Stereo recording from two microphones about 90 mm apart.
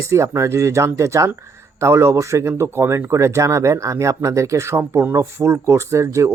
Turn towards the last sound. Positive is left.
turn(degrees=-35)  # may be behind; listen again after turning